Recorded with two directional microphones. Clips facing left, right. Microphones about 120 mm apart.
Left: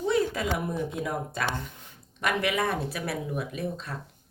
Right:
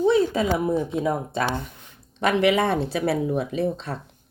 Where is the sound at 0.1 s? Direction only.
25° right (ahead or behind).